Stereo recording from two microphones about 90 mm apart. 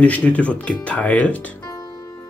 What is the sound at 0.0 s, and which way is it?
Speech, 15° left (ahead or behind).